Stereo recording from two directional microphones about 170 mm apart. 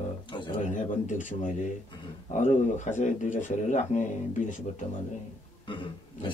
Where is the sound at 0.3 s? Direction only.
30° left (ahead or behind).